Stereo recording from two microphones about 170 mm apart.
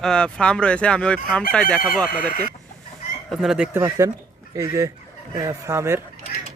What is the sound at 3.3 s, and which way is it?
Speech, centre (ahead or behind).